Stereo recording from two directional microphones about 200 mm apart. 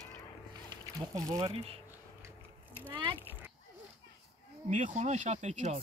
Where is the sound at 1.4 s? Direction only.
20° right (ahead or behind).